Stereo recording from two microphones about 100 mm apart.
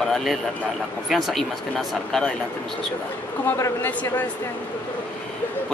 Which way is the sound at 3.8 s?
20° left (ahead or behind).